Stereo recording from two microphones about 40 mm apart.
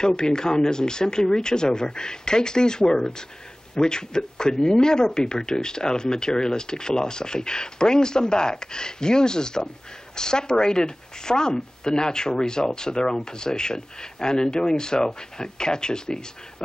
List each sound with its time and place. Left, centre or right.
0.0 s speech: centre